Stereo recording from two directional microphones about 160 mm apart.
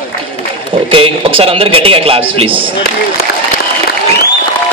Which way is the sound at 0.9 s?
35° right (ahead or behind).